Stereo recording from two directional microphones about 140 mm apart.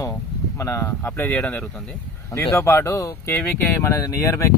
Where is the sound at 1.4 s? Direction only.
5° left (ahead or behind).